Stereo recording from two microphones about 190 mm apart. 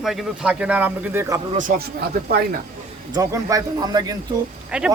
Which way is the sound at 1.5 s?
45° right (ahead or behind).